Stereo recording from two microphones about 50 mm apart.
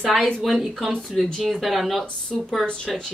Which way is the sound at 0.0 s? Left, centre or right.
Centre.